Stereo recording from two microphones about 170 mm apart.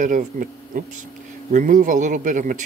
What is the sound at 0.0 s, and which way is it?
Speech, 50° right (ahead or behind).